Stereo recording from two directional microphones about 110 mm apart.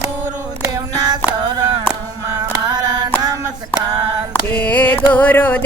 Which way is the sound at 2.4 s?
35° right (ahead or behind).